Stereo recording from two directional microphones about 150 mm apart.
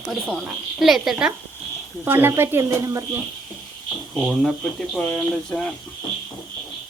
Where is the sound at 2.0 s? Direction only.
15° right (ahead or behind).